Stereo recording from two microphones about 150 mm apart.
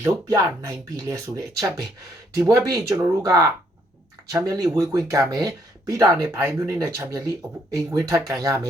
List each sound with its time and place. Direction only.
0.0 s speech: 20° right (ahead or behind)